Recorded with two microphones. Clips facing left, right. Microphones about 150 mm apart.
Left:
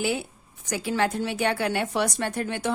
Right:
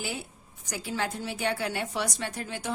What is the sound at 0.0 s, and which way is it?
A woman's voice, 75° left (ahead or behind).